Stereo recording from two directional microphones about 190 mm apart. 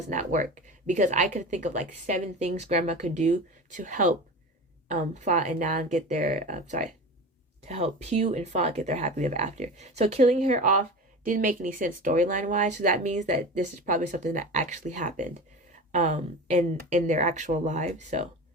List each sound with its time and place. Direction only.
0.1 s speech: 40° right (ahead or behind)